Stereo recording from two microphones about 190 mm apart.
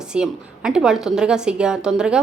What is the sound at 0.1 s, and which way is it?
A woman's voice, 5° right (ahead or behind).